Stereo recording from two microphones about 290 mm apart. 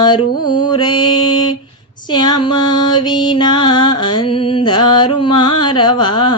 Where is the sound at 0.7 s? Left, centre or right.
Centre.